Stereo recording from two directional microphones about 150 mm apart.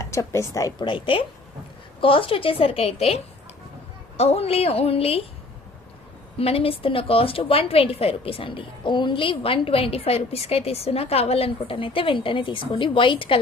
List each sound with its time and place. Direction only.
0.0 s a woman's voice: 20° left (ahead or behind); by 3.2 s 40° left (ahead or behind)
4.2 s a woman's voice: 45° left (ahead or behind)
6.4 s a woman's voice: 40° left (ahead or behind)